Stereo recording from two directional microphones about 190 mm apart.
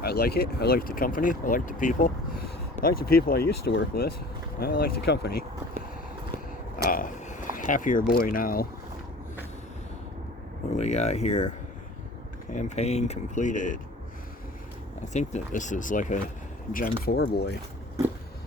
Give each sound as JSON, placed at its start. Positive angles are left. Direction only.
{"t": 0.0, "sound": "speech", "side_deg": 55}
{"t": 6.8, "sound": "a sound", "side_deg": 45}
{"t": 10.8, "sound": "speech", "side_deg": 35}
{"t": 12.5, "sound": "speech", "side_deg": 35}
{"t": 15.1, "sound": "speech", "side_deg": 40}
{"t": 17.1, "sound": "speech", "side_deg": 60}